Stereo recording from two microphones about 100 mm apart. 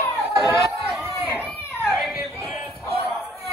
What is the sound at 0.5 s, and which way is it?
Chatter, 30° right (ahead or behind).